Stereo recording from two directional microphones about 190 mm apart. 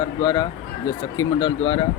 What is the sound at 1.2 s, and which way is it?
Speech, 25° left (ahead or behind).